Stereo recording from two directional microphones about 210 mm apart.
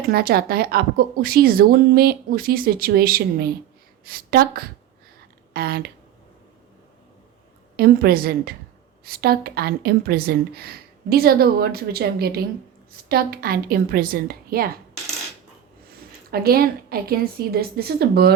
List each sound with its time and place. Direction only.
0.1 s a woman's voice: 45° right (ahead or behind)
7.8 s a woman's voice: 45° right (ahead or behind)
16.3 s a woman's voice: 45° right (ahead or behind)